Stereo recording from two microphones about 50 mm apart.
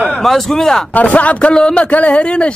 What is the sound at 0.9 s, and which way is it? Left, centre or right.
Speech, left.